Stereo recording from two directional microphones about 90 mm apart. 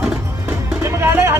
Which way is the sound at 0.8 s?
30° right (ahead or behind).